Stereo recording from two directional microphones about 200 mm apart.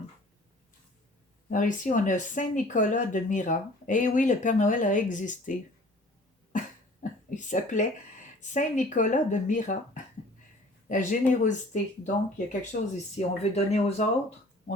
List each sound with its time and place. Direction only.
1.5 s speech: 40° left (ahead or behind)
6.5 s cough: 40° left (ahead or behind)
8.4 s speech: 40° left (ahead or behind)
13.1 s speech: 35° left (ahead or behind)